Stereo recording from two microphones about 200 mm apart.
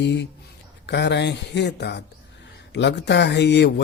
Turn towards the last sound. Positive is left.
turn(degrees=60)  # may be behind; listen again after turning